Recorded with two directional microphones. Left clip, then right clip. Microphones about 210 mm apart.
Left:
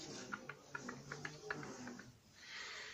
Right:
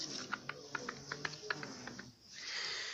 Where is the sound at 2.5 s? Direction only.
50° right (ahead or behind).